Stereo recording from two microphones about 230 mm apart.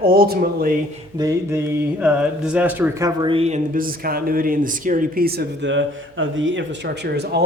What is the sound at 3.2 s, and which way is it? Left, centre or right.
A man's voice, right.